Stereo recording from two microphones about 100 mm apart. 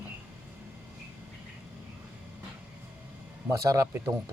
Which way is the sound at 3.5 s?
35° right (ahead or behind).